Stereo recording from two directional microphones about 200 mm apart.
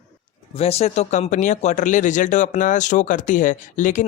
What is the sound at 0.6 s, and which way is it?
Speech, 30° left (ahead or behind).